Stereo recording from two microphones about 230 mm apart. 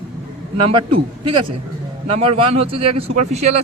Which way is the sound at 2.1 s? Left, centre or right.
Right.